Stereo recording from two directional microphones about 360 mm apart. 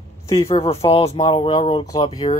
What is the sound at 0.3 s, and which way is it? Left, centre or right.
Speech, centre.